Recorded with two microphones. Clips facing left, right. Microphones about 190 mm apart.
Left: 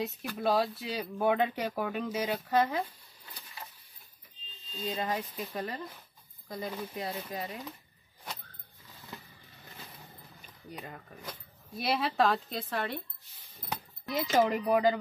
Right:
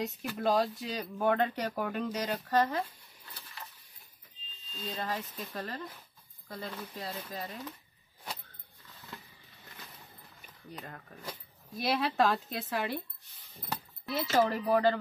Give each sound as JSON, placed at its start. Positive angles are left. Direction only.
{"t": 0.0, "sound": "speech", "side_deg": 0}
{"t": 4.8, "sound": "speech", "side_deg": 15}
{"t": 10.7, "sound": "speech", "side_deg": 10}
{"t": 14.0, "sound": "speech", "side_deg": 15}